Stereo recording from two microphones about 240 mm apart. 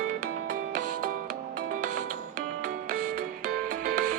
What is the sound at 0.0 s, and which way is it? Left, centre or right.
Music, right.